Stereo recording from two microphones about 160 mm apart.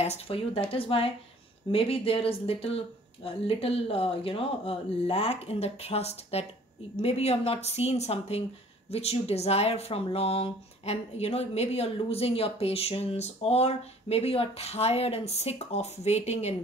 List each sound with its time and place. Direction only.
0.0 s speech: 40° left (ahead or behind)